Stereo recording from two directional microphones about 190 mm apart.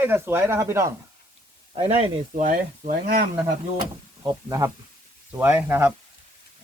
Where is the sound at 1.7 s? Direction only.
30° right (ahead or behind).